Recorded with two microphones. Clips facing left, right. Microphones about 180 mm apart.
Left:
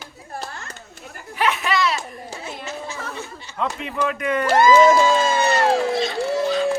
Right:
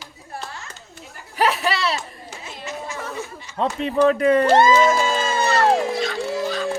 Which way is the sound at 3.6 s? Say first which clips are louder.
Right 6 dB; 35° right (ahead or behind).